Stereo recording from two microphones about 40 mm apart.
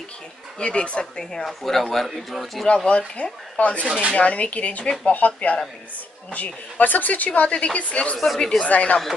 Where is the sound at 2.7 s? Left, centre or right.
Left.